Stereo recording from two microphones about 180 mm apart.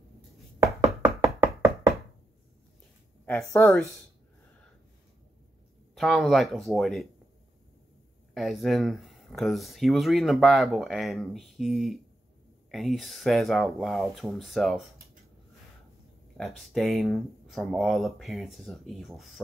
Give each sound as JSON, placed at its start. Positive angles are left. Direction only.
{"t": 0.8, "sound": "knock", "side_deg": -15}
{"t": 3.3, "sound": "speech", "side_deg": 10}
{"t": 5.9, "sound": "speech", "side_deg": 0}
{"t": 8.4, "sound": "speech", "side_deg": 0}
{"t": 16.3, "sound": "speech", "side_deg": 0}